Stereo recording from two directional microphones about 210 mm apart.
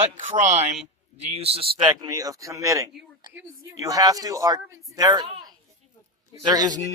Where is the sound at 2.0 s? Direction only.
15° right (ahead or behind).